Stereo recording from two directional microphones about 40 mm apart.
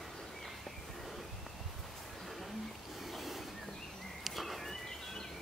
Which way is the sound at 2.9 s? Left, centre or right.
Centre.